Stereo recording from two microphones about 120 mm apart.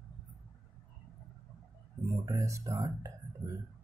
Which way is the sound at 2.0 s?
25° right (ahead or behind).